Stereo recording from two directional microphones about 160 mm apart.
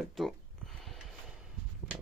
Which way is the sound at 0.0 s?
Centre (ahead or behind).